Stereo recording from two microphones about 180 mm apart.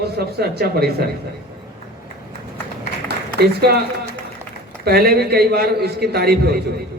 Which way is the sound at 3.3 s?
60° right (ahead or behind).